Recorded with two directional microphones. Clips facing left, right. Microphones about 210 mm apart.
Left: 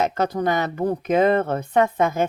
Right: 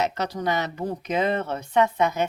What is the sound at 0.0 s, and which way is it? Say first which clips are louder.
Speech: left 4 dB; 50° left (ahead or behind).